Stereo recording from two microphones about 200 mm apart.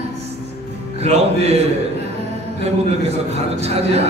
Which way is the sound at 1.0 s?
30° right (ahead or behind).